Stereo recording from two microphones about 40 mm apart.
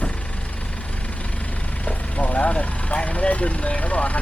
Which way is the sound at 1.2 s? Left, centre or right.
Left.